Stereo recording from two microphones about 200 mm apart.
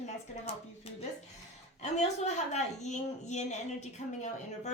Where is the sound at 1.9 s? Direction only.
35° left (ahead or behind).